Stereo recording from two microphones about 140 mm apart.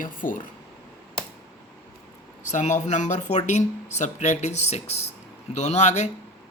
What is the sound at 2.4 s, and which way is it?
Speech, 60° left (ahead or behind).